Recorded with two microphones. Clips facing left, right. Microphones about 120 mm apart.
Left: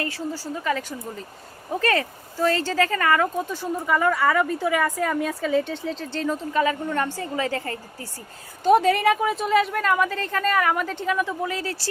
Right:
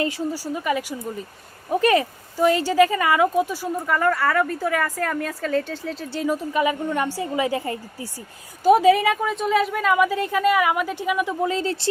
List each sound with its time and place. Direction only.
0.0 s a woman's voice: 15° right (ahead or behind)
3.8 s a woman's voice: 5° left (ahead or behind); by 7.8 s 15° right (ahead or behind)
8.6 s a woman's voice: 5° right (ahead or behind); by 11.9 s 25° right (ahead or behind)